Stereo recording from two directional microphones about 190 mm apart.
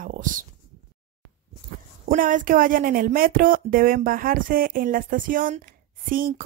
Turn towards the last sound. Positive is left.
turn(degrees=-50)  # may be behind; listen again after turning